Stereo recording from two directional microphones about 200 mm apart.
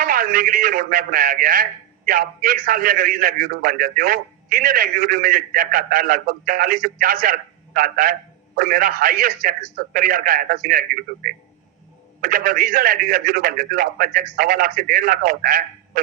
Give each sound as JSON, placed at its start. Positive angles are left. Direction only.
{"t": 0.0, "sound": "a man's voice", "side_deg": -45}